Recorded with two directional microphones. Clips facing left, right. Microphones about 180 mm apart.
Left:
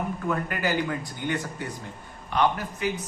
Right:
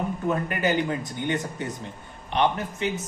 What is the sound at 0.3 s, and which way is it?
A man's voice, 20° right (ahead or behind).